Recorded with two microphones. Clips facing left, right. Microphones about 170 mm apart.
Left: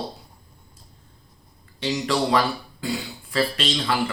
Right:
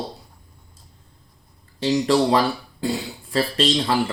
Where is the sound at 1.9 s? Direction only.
30° right (ahead or behind).